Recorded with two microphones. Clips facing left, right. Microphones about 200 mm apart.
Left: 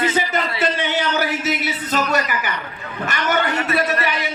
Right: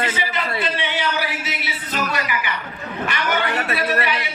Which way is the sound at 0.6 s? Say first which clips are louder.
Left 4 dB; 45° left (ahead or behind).